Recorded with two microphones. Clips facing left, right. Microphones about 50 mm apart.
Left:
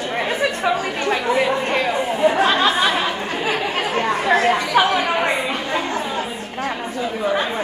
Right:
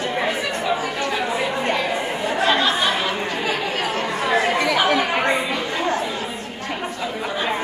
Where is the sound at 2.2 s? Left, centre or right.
Left.